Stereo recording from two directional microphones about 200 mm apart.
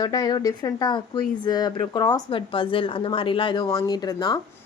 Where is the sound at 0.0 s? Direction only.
20° left (ahead or behind).